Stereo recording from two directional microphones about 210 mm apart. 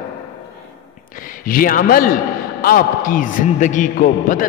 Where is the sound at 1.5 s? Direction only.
45° left (ahead or behind).